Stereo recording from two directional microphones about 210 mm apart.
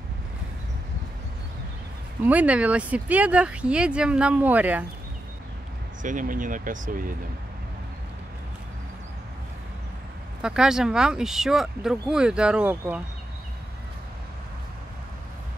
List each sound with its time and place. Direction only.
2.2 s speech: 5° right (ahead or behind)
6.0 s speech: 40° right (ahead or behind)
10.4 s speech: 5° right (ahead or behind)